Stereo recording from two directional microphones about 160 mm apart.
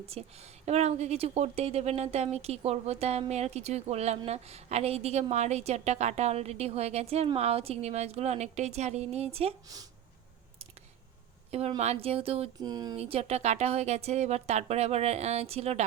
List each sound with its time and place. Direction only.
0.0 s a woman's voice: 40° right (ahead or behind)
11.8 s a woman's voice: 40° right (ahead or behind)
12.5 s speech: 25° right (ahead or behind)
13.0 s a woman's voice: 40° right (ahead or behind)